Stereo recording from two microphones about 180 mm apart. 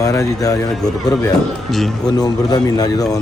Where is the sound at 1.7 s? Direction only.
Centre (ahead or behind).